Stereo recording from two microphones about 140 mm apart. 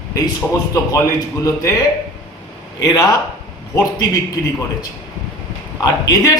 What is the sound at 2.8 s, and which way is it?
A man's voice, 25° left (ahead or behind).